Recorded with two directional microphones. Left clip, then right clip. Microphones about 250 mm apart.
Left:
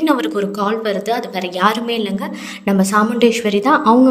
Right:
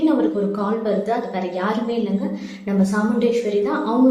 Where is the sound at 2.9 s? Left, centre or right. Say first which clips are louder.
Left 6 dB; left.